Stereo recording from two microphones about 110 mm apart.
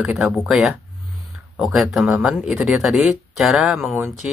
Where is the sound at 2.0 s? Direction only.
5° right (ahead or behind).